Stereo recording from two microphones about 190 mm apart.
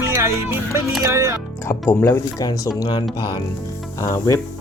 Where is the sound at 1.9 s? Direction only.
15° left (ahead or behind).